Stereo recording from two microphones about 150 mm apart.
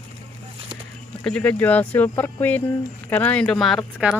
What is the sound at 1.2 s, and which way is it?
Speech, 5° left (ahead or behind).